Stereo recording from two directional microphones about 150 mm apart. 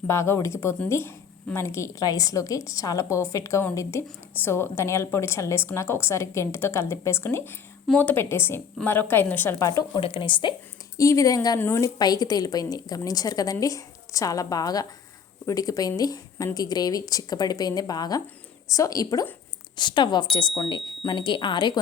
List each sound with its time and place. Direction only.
0.1 s a woman's voice: 20° left (ahead or behind)
10.0 s speech: 35° left (ahead or behind)
10.9 s a woman's voice: 20° left (ahead or behind)